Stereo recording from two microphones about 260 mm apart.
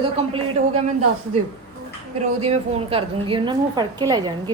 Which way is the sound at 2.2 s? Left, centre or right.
Right.